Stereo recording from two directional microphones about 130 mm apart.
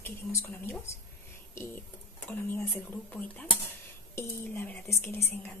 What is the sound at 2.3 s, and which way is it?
Speech, 15° left (ahead or behind).